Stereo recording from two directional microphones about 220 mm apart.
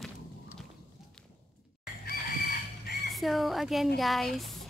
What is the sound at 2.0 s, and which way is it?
Chicken, 40° left (ahead or behind).